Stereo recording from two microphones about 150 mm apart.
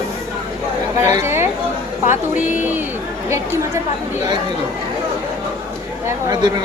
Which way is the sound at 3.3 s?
20° right (ahead or behind).